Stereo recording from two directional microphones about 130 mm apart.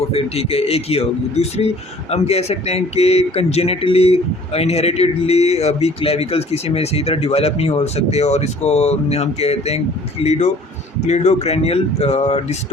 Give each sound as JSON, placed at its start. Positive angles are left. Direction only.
{"t": 0.1, "sound": "a man's voice", "side_deg": 50}